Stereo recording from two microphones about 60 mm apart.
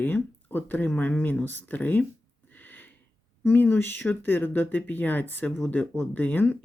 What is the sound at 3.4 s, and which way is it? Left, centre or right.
Speech, left.